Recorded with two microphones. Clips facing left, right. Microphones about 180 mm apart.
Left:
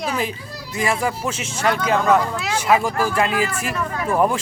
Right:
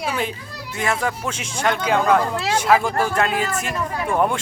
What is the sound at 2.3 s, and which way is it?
Speech, 30° right (ahead or behind).